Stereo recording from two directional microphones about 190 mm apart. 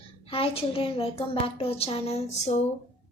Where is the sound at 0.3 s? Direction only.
30° left (ahead or behind).